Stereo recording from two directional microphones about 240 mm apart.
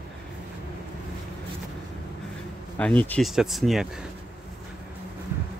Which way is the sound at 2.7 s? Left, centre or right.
Centre.